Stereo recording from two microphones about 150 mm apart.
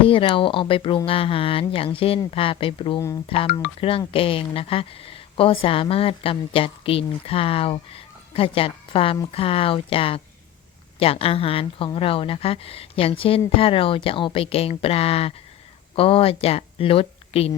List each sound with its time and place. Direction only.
0.0 s a woman's voice: 35° left (ahead or behind)